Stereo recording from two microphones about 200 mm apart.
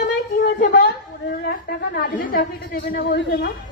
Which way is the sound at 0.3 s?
50° left (ahead or behind).